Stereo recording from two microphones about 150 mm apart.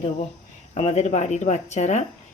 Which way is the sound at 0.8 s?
50° left (ahead or behind).